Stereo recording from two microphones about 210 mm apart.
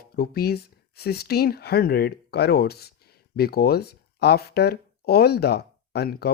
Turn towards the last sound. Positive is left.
turn(degrees=50)  # may be behind; listen again after turning